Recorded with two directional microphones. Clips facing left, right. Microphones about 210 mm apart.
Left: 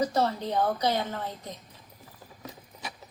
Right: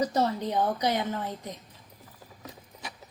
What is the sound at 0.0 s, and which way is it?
A woman's voice, 15° right (ahead or behind).